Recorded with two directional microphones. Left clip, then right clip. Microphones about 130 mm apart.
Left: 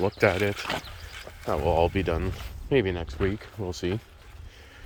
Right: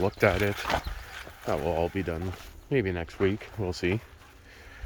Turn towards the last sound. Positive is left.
turn(degrees=-15)  # may be behind; listen again after turning